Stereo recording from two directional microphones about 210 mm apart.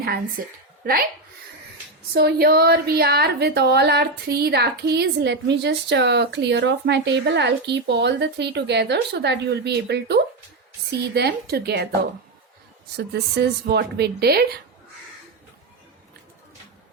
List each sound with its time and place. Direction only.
0.0 s speech: 45° right (ahead or behind)
2.1 s speech: 45° right (ahead or behind)
13.7 s speech: 50° right (ahead or behind)